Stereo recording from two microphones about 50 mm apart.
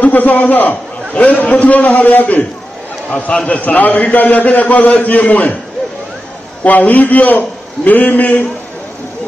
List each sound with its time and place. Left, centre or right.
0.0 s a man's voice: left
3.1 s a man's voice: left
6.6 s a man's voice: left